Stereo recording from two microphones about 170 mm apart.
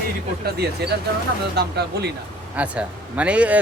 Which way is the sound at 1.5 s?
75° right (ahead or behind).